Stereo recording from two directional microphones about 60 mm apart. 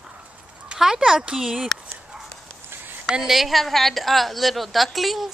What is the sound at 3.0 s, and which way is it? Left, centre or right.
A woman's voice, centre.